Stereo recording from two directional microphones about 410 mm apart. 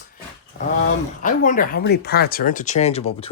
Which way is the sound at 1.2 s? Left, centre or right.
Centre.